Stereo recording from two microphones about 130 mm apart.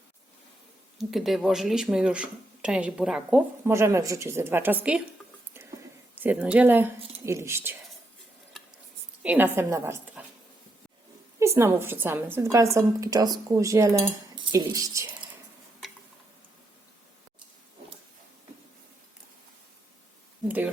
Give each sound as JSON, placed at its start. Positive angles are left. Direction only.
{"t": 0.9, "sound": "speech", "side_deg": 0}
{"t": 3.6, "sound": "a woman's voice", "side_deg": -20}
{"t": 6.1, "sound": "speech", "side_deg": -10}
{"t": 8.6, "sound": "a sound", "side_deg": 5}
{"t": 9.2, "sound": "a woman's voice", "side_deg": -15}
{"t": 11.3, "sound": "a woman's voice", "side_deg": -20}